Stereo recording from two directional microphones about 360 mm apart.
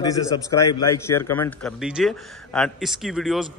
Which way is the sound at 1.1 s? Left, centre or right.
Centre.